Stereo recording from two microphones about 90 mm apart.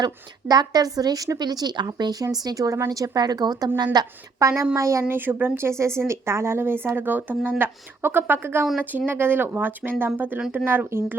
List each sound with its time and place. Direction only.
0.0 s a woman's voice: 45° right (ahead or behind)
3.9 s a woman's voice: 35° right (ahead or behind)
5.0 s a woman's voice: 20° right (ahead or behind)